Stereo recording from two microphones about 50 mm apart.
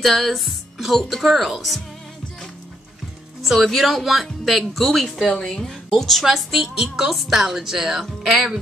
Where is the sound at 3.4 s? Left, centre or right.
Centre.